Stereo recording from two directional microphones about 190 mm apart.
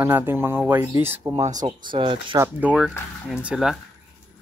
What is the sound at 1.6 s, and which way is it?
Speech, 25° right (ahead or behind).